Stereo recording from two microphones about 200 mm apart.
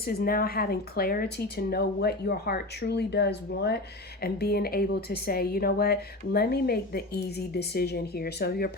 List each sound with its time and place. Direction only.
0.0 s a woman's voice: 50° left (ahead or behind)